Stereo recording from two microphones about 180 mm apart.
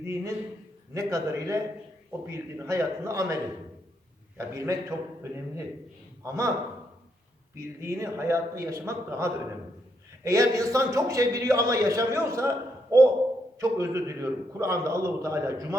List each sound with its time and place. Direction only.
0.0 s a man's voice: 15° right (ahead or behind)
4.4 s a man's voice: 15° right (ahead or behind)
7.5 s a man's voice: 15° right (ahead or behind)